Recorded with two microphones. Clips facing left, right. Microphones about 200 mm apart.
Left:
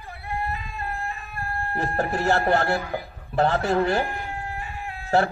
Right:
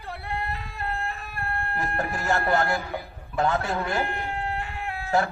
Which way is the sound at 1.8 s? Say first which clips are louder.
Left 7 dB; 30° left (ahead or behind).